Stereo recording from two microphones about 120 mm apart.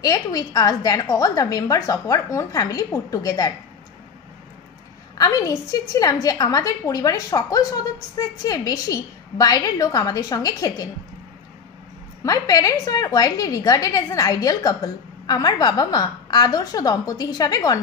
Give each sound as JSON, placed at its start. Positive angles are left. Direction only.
{"t": 0.0, "sound": "a woman's voice", "side_deg": 30}
{"t": 5.1, "sound": "a woman's voice", "side_deg": 30}
{"t": 12.2, "sound": "a woman's voice", "side_deg": 30}